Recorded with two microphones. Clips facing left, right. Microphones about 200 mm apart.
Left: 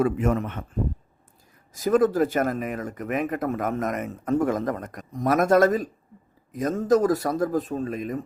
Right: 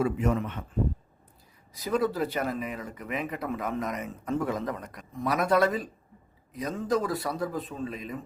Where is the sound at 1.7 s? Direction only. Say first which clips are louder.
Left 7 dB; 45° left (ahead or behind).